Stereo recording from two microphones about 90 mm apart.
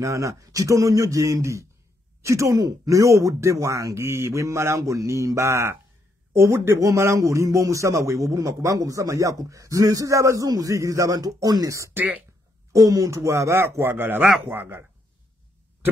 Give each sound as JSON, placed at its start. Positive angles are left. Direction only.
{"t": 0.0, "sound": "a man's voice", "side_deg": -35}